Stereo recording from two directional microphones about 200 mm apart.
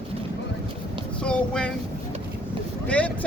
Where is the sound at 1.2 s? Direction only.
5° left (ahead or behind).